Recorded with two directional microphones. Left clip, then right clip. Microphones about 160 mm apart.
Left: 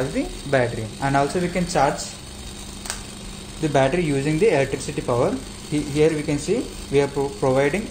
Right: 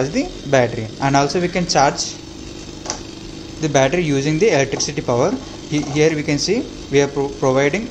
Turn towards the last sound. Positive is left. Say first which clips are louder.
# right 3 dB
turn(degrees=-20)  # may be behind; listen again after turning